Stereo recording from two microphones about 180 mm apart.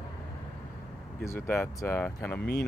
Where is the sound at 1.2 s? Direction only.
15° left (ahead or behind).